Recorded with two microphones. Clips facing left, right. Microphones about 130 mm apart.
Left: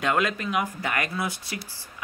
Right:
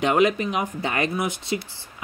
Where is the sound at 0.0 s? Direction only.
20° right (ahead or behind).